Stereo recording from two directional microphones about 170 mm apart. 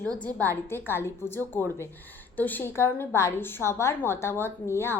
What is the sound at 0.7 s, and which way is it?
A woman's voice, 15° left (ahead or behind).